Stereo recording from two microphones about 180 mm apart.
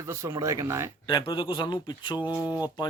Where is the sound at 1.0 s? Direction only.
25° left (ahead or behind).